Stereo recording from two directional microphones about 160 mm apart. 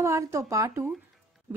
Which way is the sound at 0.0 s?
20° right (ahead or behind).